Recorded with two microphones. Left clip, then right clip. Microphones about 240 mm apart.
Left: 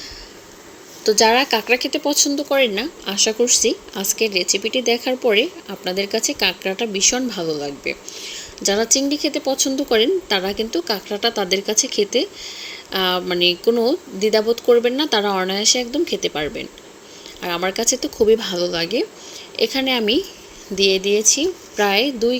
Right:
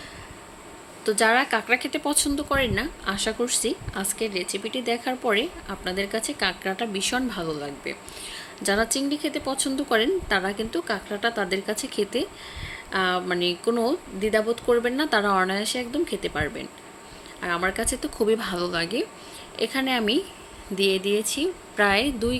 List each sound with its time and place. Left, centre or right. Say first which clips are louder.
1.0 s speech: left 6 dB; centre
12.5 s a sound: left 2 dB; left
12.9 s speech: left 4 dB; centre